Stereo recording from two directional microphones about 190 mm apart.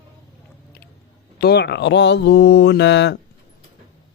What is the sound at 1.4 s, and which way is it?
Mantra, 60° left (ahead or behind).